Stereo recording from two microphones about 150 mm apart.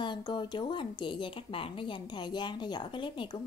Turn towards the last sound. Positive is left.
turn(degrees=30)  # may be behind; listen again after turning